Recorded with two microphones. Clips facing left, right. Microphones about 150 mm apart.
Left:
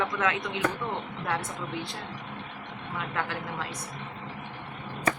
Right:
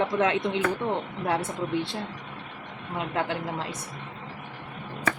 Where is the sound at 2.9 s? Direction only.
25° right (ahead or behind).